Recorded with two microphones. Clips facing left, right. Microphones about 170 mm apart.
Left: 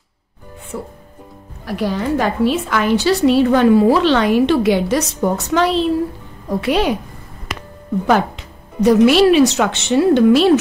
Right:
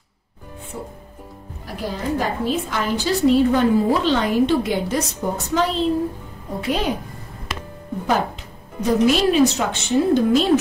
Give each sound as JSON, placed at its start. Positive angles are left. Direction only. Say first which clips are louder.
{"t": 0.7, "sound": "a woman's voice", "louder": "left 6 dB", "side_deg": 75}
{"t": 8.8, "sound": "a woman's voice", "louder": "left 7 dB", "side_deg": 75}